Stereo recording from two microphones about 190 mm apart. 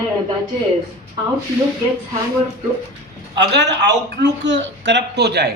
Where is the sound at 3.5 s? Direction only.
65° right (ahead or behind).